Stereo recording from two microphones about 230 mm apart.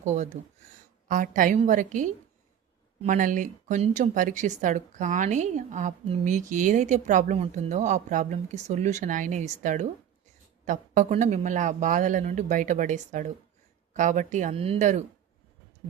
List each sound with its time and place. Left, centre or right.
0.0 s speech: right